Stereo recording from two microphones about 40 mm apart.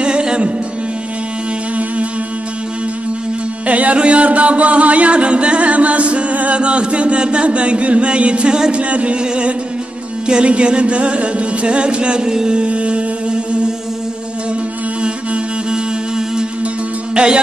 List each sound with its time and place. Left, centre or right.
0.0 s music: right
3.6 s chant: right
8.7 s music: right
15.0 s music: right